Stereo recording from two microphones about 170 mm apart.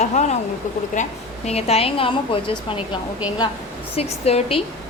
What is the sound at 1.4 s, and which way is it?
A woman's voice, 35° left (ahead or behind).